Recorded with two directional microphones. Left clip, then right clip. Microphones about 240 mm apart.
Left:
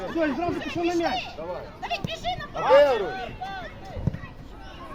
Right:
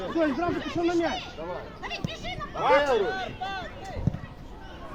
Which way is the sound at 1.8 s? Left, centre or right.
Left.